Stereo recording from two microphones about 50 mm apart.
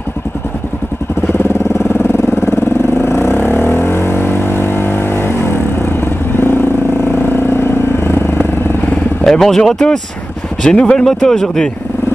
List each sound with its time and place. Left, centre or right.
2.0 s vehicle: left
9.2 s a sound: centre
9.7 s speech: centre
11.1 s speech: centre